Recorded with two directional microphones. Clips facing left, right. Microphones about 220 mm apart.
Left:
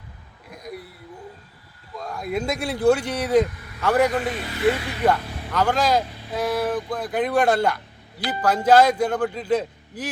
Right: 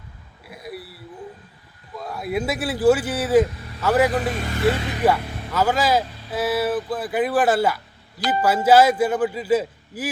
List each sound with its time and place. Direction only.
0.5 s a sound: 5° right (ahead or behind)
2.0 s speech: 5° right (ahead or behind)
4.2 s speech: 45° right (ahead or behind)
5.0 s a man's voice: 5° right (ahead or behind)